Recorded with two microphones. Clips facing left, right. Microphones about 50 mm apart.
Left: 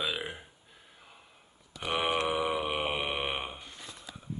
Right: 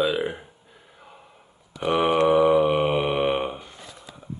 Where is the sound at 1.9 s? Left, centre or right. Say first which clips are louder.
Right 9 dB; centre.